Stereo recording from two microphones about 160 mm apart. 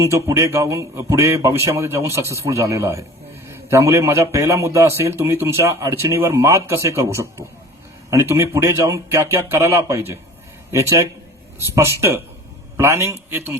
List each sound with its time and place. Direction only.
0.0 s a man's voice: 20° right (ahead or behind)